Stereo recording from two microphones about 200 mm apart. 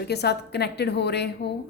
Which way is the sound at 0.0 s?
55° left (ahead or behind).